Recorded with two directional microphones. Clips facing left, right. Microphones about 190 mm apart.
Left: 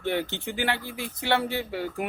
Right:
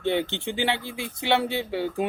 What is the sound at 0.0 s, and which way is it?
A man's voice, 20° right (ahead or behind).